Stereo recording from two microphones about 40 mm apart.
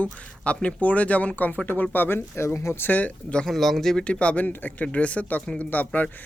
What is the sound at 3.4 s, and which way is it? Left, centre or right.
Speech, centre.